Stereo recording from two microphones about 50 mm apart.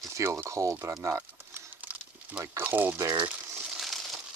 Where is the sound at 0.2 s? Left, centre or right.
Right.